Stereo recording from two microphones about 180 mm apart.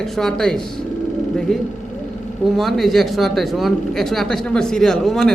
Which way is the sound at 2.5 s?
Centre (ahead or behind).